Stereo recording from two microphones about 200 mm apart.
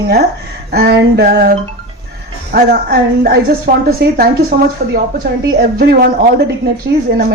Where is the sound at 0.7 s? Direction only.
50° right (ahead or behind).